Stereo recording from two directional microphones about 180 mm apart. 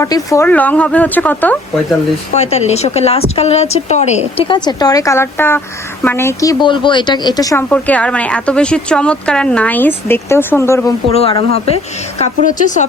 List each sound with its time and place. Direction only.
0.0 s speech: 15° left (ahead or behind)
2.3 s speech: 40° left (ahead or behind)
4.4 s a woman's voice: 25° left (ahead or behind)
7.7 s speech: 10° left (ahead or behind)
11.1 s speech: 30° left (ahead or behind)
12.5 s speech: 45° left (ahead or behind)